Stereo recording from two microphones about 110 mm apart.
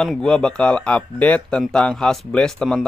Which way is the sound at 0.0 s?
5° left (ahead or behind).